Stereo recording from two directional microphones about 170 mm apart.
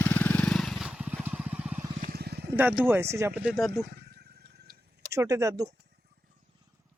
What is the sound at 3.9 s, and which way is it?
Wild animals, 70° right (ahead or behind).